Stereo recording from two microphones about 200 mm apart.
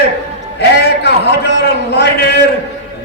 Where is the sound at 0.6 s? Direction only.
55° left (ahead or behind).